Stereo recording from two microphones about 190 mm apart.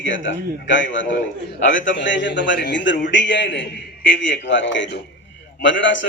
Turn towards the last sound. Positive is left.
turn(degrees=75)  # may be behind; listen again after turning